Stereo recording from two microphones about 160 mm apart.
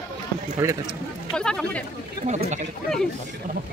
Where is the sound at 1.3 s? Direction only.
5° left (ahead or behind).